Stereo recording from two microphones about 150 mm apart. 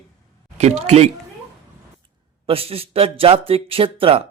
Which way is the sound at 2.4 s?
40° right (ahead or behind).